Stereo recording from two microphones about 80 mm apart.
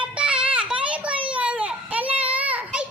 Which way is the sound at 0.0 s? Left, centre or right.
Centre.